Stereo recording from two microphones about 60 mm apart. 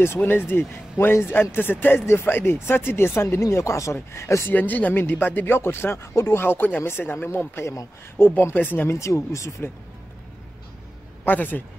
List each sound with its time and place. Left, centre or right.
0.0 s speech: left
4.5 s speech: left
8.8 s speech: left
11.2 s speech: left